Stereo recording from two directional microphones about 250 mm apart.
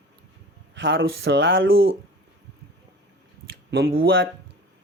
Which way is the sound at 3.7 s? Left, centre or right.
Right.